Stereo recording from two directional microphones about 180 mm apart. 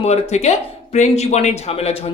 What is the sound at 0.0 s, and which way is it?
Speech, 40° left (ahead or behind).